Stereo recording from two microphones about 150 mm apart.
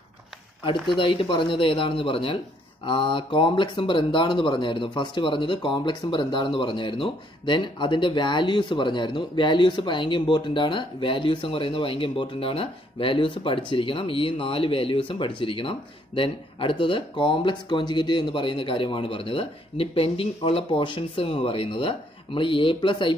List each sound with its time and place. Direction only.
0.7 s speech: 35° left (ahead or behind)